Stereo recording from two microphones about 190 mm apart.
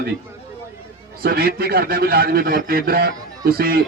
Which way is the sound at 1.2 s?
55° right (ahead or behind).